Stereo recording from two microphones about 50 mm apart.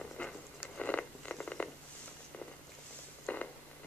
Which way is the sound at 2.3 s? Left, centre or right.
Left.